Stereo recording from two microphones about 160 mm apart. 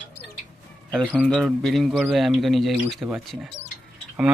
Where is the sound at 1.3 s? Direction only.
Centre (ahead or behind).